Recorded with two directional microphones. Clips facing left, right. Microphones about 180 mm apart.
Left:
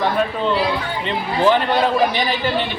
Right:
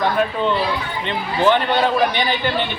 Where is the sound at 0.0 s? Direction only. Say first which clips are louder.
Even; centre (ahead or behind).